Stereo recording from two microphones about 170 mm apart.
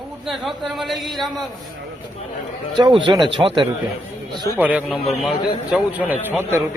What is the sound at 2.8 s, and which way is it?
A man's voice, 25° right (ahead or behind).